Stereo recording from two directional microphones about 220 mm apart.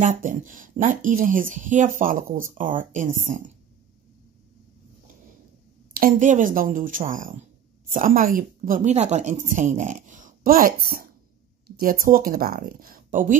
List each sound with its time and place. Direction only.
0.0 s a woman's voice: 35° right (ahead or behind)
5.9 s a woman's voice: 35° right (ahead or behind)